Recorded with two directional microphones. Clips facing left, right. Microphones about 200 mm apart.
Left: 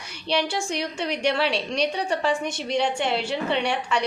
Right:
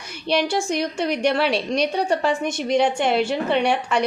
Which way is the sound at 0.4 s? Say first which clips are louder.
Right 5 dB; 45° right (ahead or behind).